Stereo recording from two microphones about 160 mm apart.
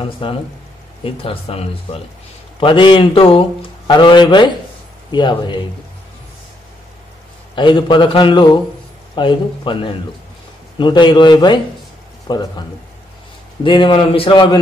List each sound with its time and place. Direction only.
0.0 s speech: 30° left (ahead or behind)
7.5 s speech: 30° left (ahead or behind)
13.7 s speech: 30° left (ahead or behind)